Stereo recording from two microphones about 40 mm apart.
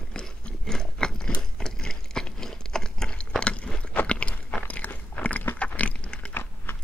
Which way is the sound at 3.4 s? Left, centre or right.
Left.